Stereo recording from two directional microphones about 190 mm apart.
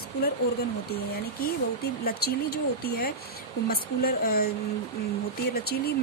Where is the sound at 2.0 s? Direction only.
55° left (ahead or behind).